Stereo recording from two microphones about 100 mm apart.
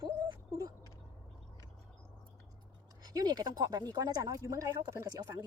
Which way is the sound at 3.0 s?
40° right (ahead or behind).